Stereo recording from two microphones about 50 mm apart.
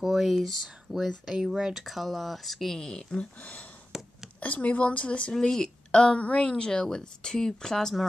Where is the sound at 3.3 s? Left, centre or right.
Left.